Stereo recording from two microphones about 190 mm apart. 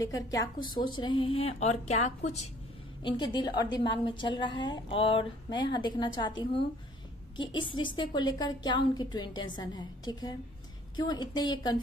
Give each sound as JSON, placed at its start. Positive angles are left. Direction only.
{"t": 0.0, "sound": "a woman's voice", "side_deg": 20}
{"t": 1.4, "sound": "speech", "side_deg": 35}
{"t": 3.0, "sound": "a woman's voice", "side_deg": 25}